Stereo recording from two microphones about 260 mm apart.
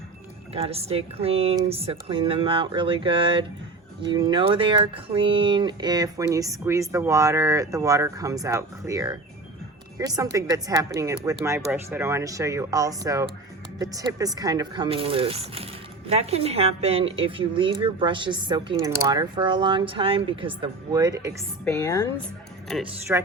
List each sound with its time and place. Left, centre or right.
0.5 s a woman's voice: right
21.6 s a woman's voice: centre
23.1 s speech: centre